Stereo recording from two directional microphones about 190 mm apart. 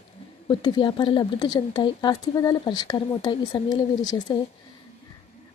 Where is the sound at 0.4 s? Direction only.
25° left (ahead or behind).